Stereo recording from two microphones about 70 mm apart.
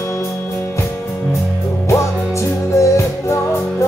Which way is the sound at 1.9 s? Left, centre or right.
Left.